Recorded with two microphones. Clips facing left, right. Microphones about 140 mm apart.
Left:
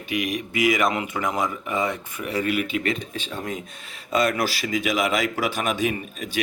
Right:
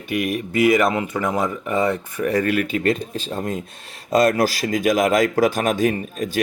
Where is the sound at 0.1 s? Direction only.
50° right (ahead or behind).